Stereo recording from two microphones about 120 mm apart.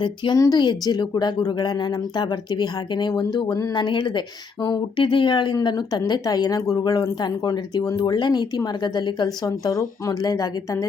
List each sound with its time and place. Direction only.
0.0 s speech: 35° left (ahead or behind)